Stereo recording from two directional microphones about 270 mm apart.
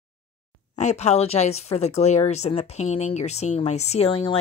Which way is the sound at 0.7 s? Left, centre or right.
Left.